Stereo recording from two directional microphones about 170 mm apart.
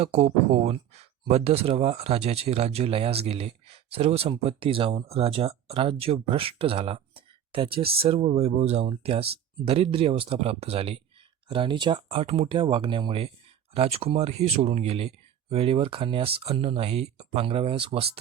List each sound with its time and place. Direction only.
0.0 s speech: 40° right (ahead or behind)